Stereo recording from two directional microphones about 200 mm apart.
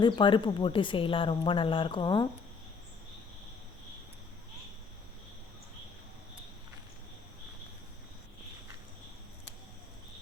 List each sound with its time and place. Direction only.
0.0 s speech: 25° left (ahead or behind)